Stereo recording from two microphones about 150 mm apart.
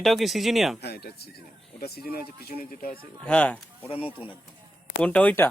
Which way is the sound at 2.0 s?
75° left (ahead or behind).